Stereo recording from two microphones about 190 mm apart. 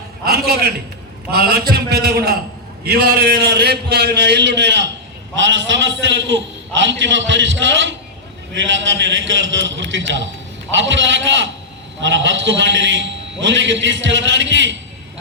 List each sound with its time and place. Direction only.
0.3 s a man's voice: 55° right (ahead or behind)
5.5 s a man's voice: 75° right (ahead or behind)